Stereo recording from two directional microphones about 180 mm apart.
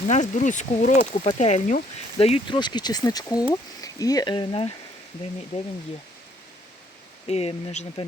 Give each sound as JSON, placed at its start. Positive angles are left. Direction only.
{"t": 0.1, "sound": "speech", "side_deg": 45}
{"t": 7.3, "sound": "speech", "side_deg": 35}